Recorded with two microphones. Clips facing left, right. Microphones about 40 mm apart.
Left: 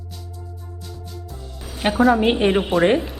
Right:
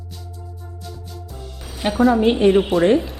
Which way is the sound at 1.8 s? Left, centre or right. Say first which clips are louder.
Even; centre.